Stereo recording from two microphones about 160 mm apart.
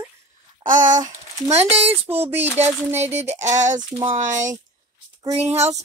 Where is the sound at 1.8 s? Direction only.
15° right (ahead or behind).